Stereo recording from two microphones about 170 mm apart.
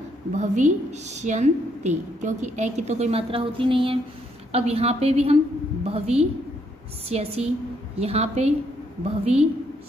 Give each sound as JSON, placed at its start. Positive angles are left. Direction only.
{"t": 0.4, "sound": "a woman's voice", "side_deg": -45}